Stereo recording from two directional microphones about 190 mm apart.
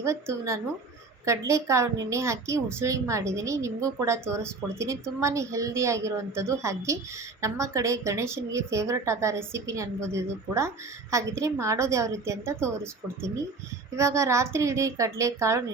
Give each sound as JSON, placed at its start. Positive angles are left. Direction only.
{"t": 0.0, "sound": "a woman's voice", "side_deg": -15}